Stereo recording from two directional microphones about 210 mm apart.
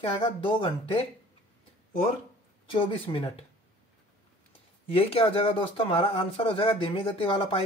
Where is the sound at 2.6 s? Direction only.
25° left (ahead or behind).